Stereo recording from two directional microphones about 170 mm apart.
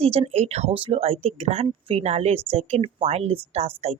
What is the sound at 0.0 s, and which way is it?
Speech, 35° right (ahead or behind).